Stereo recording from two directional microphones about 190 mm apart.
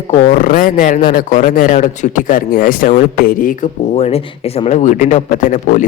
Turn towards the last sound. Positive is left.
turn(degrees=40)  # may be behind; listen again after turning